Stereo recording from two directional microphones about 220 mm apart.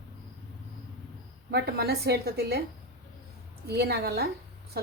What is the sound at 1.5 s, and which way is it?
Speech, 45° right (ahead or behind).